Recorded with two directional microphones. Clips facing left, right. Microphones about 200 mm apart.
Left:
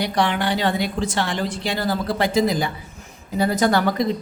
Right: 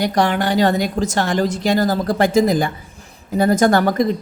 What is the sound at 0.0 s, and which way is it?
Speech, 45° right (ahead or behind).